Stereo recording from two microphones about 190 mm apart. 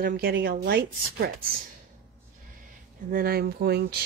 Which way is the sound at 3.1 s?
50° right (ahead or behind).